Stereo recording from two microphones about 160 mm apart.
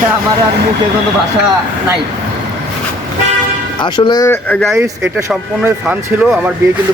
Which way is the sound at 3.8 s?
30° left (ahead or behind).